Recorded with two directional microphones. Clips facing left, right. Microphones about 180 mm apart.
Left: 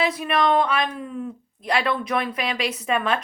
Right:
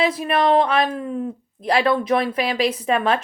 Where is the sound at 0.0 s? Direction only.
30° right (ahead or behind).